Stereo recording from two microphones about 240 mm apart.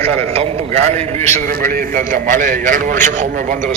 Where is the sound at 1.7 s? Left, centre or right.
Right.